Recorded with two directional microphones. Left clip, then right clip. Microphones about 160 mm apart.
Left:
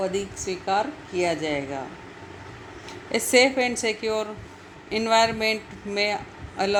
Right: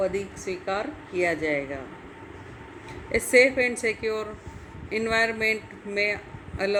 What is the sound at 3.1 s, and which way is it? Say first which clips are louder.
Speech: even; 20° left (ahead or behind).